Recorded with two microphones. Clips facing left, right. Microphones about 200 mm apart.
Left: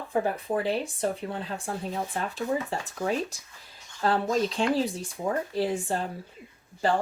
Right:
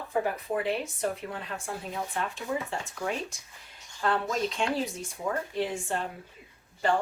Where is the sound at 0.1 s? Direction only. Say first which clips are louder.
Left 2 dB; 30° left (ahead or behind).